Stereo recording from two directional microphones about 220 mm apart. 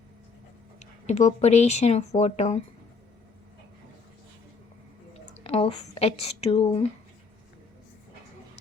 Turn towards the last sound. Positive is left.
turn(degrees=25)  # may be behind; listen again after turning